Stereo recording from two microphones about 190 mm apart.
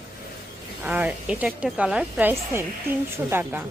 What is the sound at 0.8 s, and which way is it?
A woman's voice, 10° right (ahead or behind).